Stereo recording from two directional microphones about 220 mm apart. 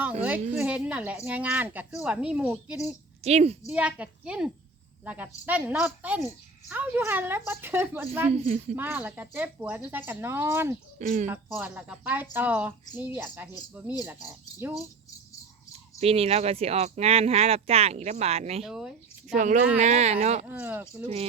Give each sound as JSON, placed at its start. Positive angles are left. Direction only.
{"t": 0.2, "sound": "a woman's voice", "side_deg": -5}
{"t": 3.2, "sound": "speech", "side_deg": -30}
{"t": 3.7, "sound": "a woman's voice", "side_deg": -5}
{"t": 8.3, "sound": "speech", "side_deg": -30}
{"t": 8.7, "sound": "a woman's voice", "side_deg": -10}
{"t": 10.9, "sound": "speech", "side_deg": -35}
{"t": 11.3, "sound": "a woman's voice", "side_deg": -5}
{"t": 16.0, "sound": "speech", "side_deg": -25}
{"t": 18.6, "sound": "a woman's voice", "side_deg": -5}
{"t": 19.3, "sound": "speech", "side_deg": -35}
{"t": 20.5, "sound": "a woman's voice", "side_deg": -10}